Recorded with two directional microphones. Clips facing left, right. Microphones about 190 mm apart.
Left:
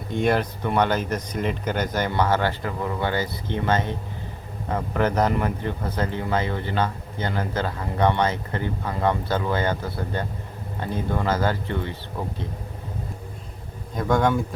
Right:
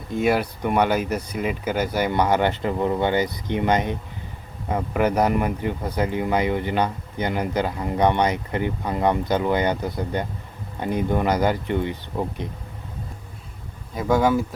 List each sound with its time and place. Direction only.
0.1 s speech: 5° right (ahead or behind)
13.9 s speech: 5° right (ahead or behind)